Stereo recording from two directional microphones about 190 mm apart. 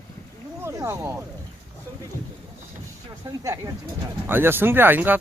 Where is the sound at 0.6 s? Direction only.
15° right (ahead or behind).